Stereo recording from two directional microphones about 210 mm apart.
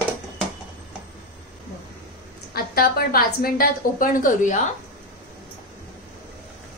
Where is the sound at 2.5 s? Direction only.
45° left (ahead or behind).